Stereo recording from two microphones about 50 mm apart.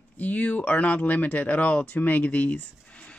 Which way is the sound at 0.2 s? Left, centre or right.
Left.